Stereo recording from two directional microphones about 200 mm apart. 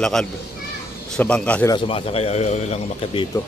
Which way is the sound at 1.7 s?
30° left (ahead or behind).